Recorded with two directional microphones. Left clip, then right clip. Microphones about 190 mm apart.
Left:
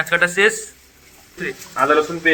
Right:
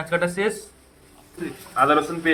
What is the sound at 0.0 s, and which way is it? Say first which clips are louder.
Speech: left 7 dB; centre (ahead or behind).